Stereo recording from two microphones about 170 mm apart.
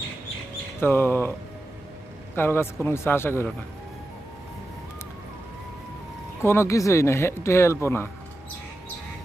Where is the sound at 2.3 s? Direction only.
15° left (ahead or behind).